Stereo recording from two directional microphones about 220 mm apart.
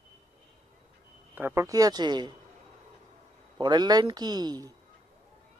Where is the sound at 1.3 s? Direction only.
10° right (ahead or behind).